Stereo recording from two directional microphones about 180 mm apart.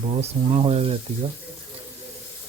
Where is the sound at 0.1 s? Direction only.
35° right (ahead or behind).